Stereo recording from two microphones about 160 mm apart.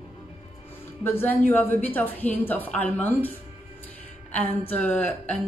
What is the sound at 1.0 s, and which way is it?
Speech, 10° left (ahead or behind).